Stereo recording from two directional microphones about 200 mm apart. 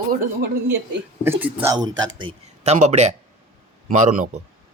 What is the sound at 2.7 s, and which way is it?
Speech, 35° right (ahead or behind).